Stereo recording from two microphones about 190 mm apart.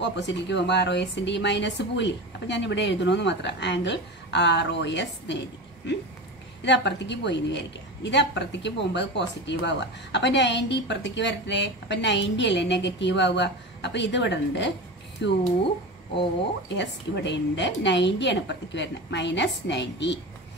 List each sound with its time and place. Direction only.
0.0 s a woman's voice: 70° left (ahead or behind)
6.6 s a woman's voice: 65° left (ahead or behind)
16.6 s a woman's voice: 65° left (ahead or behind)